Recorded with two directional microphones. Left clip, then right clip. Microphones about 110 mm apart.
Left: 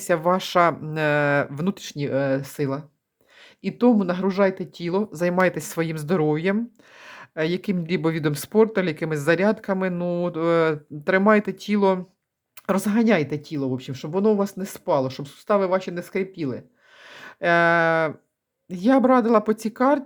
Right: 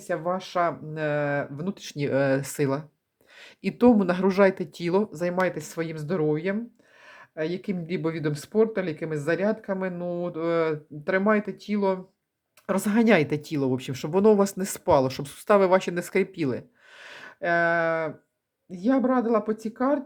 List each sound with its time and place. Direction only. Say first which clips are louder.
0.1 s speech: left 7 dB; 45° left (ahead or behind)
2.0 s speech: even; centre (ahead or behind)
5.0 s speech: left 5 dB; 20° left (ahead or behind); by 12.0 s 40° left (ahead or behind)
12.7 s speech: even; 5° left (ahead or behind)
17.4 s speech: left 5 dB; 30° left (ahead or behind)